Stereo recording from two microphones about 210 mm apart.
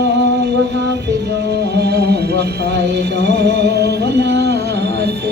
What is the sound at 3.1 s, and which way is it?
Music, 35° left (ahead or behind).